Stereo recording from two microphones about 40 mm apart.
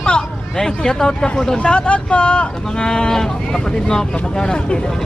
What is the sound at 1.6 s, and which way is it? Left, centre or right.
Speech, left.